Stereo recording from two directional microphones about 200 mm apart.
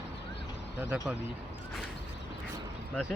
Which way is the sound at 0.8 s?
5° right (ahead or behind).